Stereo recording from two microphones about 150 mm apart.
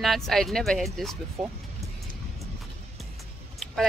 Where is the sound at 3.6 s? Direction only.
Centre (ahead or behind).